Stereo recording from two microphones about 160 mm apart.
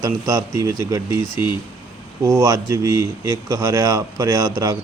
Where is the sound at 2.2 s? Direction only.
20° right (ahead or behind).